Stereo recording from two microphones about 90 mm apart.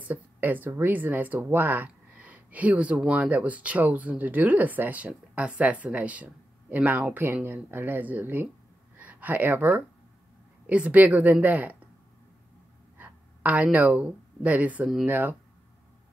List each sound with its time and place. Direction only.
0.0 s speech: 20° right (ahead or behind)
12.9 s speech: 15° right (ahead or behind)